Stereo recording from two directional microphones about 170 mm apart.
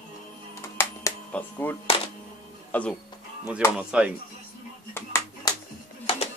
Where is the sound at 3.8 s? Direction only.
5° right (ahead or behind).